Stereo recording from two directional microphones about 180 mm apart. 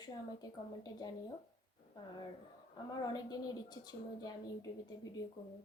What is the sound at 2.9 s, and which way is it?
A woman's voice, 20° left (ahead or behind).